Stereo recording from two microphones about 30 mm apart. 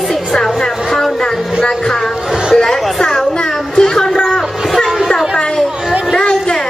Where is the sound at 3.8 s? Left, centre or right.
Centre.